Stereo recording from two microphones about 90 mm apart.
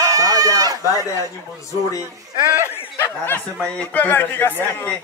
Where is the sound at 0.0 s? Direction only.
40° right (ahead or behind).